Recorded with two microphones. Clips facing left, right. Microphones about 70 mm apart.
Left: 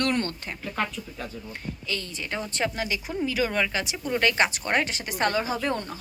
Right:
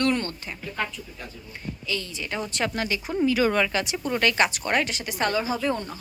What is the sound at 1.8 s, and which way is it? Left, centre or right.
Speech, left.